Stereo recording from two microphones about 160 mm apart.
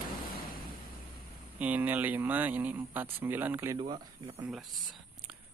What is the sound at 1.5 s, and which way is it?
Speech, 10° right (ahead or behind).